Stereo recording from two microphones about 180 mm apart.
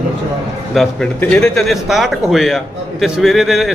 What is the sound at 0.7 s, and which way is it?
A man's voice, 5° left (ahead or behind).